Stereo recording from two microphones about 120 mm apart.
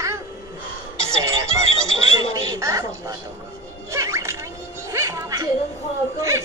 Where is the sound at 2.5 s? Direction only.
25° right (ahead or behind).